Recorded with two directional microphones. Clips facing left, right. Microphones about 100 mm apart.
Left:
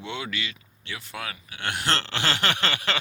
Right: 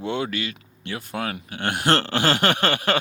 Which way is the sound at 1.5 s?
50° right (ahead or behind).